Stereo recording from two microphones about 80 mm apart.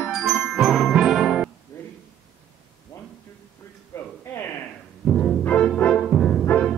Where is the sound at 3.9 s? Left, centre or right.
Left.